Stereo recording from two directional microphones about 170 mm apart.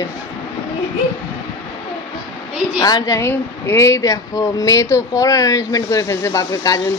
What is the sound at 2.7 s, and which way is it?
A woman's voice, 25° left (ahead or behind).